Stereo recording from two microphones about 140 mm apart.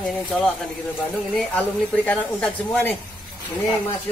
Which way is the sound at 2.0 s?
10° left (ahead or behind).